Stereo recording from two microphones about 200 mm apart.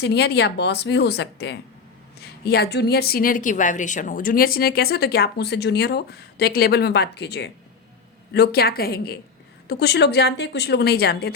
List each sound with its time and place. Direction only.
0.0 s a woman's voice: 55° left (ahead or behind)